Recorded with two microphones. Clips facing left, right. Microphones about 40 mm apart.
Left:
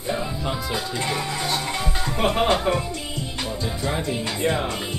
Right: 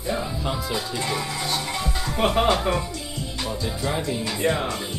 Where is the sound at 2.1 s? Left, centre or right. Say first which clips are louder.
Right 1 dB; centre.